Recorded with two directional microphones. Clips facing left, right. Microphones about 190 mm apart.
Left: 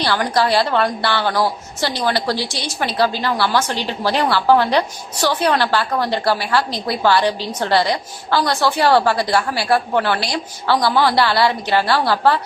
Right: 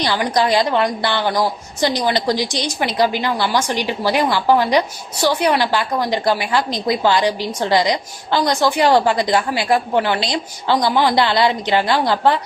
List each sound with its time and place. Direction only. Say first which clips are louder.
0.0 s a woman's voice: even; 15° right (ahead or behind)